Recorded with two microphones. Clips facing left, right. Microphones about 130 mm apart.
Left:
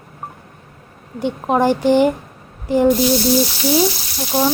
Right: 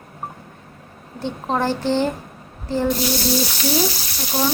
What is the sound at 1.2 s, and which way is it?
Speech, 15° left (ahead or behind).